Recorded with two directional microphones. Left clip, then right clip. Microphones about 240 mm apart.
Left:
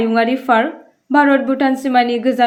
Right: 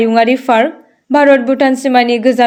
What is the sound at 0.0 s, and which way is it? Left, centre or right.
A woman's voice, right.